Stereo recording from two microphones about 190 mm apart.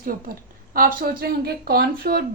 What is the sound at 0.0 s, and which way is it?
A woman's voice, 45° right (ahead or behind).